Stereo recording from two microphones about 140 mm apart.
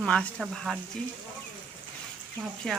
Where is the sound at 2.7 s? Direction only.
5° left (ahead or behind).